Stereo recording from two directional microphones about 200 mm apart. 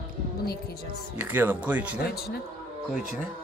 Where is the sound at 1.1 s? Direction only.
10° right (ahead or behind).